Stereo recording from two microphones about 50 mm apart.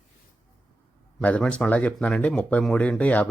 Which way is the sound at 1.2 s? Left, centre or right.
Left.